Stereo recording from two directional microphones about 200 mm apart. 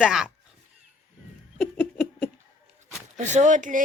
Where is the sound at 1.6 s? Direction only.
Centre (ahead or behind).